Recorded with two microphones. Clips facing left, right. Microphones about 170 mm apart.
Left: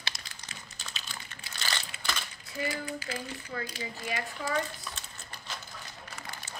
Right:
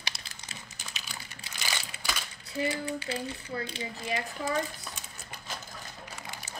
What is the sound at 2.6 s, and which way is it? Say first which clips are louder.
Speech: right 3 dB; 30° right (ahead or behind).